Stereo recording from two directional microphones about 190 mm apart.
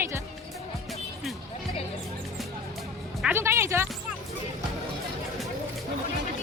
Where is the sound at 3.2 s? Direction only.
10° right (ahead or behind).